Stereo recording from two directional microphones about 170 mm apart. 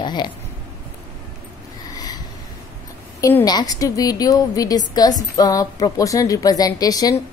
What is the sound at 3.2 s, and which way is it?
A woman's voice, 20° left (ahead or behind).